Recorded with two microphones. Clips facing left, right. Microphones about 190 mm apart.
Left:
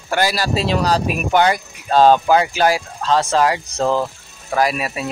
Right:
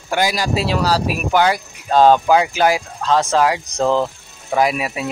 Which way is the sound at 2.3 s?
10° right (ahead or behind).